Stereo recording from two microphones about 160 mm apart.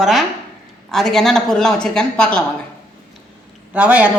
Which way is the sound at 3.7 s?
10° right (ahead or behind).